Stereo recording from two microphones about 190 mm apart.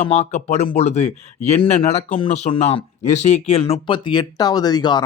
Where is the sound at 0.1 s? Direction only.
35° left (ahead or behind).